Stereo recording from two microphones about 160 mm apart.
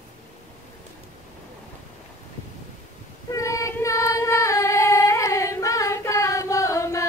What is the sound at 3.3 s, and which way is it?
Child singing, 20° left (ahead or behind).